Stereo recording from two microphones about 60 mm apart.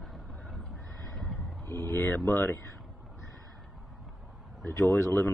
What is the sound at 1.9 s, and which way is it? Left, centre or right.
Speech, left.